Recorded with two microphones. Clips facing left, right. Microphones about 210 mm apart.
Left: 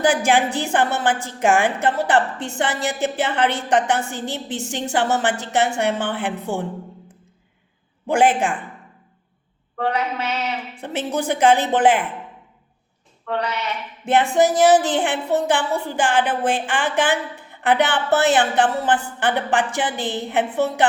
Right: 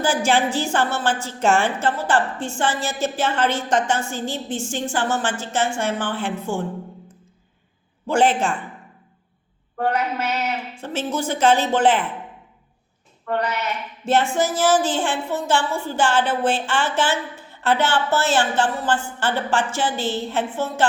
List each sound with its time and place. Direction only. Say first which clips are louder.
0.0 s speech: left 2 dB; 15° left (ahead or behind)
8.0 s speech: left 1 dB; 15° left (ahead or behind)
9.7 s a sound: even; 5° right (ahead or behind)
10.8 s speech: left 2 dB; 15° left (ahead or behind)
13.2 s a sound: right 1 dB; 5° right (ahead or behind)
14.0 s speech: left 3 dB; 15° left (ahead or behind)